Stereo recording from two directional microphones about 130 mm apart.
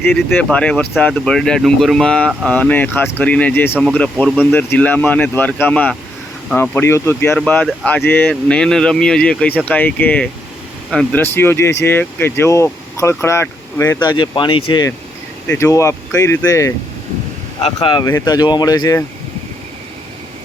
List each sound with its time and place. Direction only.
0.0 s speech: 15° left (ahead or behind)
14.0 s speech: 35° left (ahead or behind)
15.4 s speech: 20° left (ahead or behind)
17.6 s speech: 50° left (ahead or behind)
18.3 s speech: 30° left (ahead or behind)